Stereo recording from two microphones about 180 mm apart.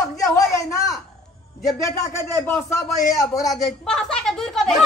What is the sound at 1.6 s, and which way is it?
A man's voice, 15° left (ahead or behind).